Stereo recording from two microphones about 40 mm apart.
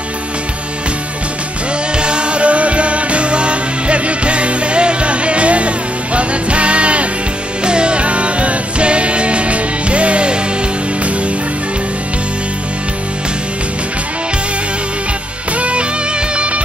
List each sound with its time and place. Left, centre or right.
2.0 s music: right
15.5 s music: right